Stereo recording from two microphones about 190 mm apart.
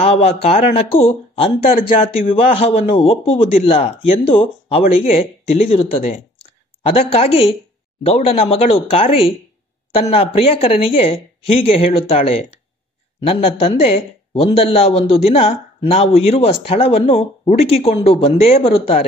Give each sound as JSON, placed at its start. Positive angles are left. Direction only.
{"t": 0.0, "sound": "speech", "side_deg": 30}